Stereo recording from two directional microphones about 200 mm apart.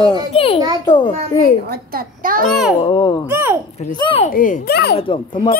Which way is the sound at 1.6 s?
45° right (ahead or behind).